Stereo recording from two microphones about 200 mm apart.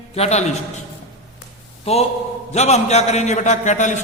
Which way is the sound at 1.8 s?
30° left (ahead or behind).